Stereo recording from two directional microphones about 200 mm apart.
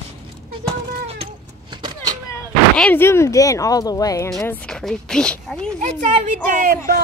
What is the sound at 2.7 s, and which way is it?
Speech, 10° left (ahead or behind).